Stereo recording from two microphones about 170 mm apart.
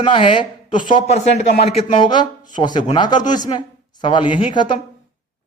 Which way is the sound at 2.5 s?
25° left (ahead or behind).